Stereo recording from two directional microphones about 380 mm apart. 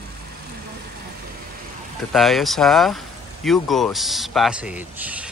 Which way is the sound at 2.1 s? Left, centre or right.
Centre.